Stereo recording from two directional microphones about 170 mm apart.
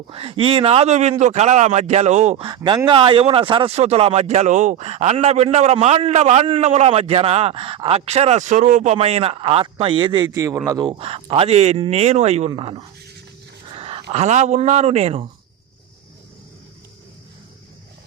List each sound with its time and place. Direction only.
0.1 s speech: 35° right (ahead or behind)
2.6 s speech: 30° right (ahead or behind)
13.7 s a sound: 35° right (ahead or behind)
14.1 s speech: 40° right (ahead or behind)